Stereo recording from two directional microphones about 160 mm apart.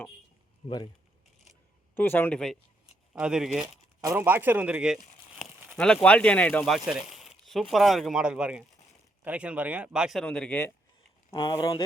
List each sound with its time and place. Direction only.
0.6 s speech: 30° left (ahead or behind)
2.0 s speech: 10° left (ahead or behind)
3.1 s speech: 5° right (ahead or behind)
4.0 s speech: 15° right (ahead or behind); by 10.7 s 10° left (ahead or behind)
11.3 s speech: 30° left (ahead or behind)